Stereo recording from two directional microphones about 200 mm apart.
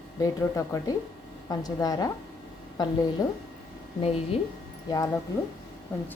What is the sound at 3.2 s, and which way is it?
Speech, 15° left (ahead or behind).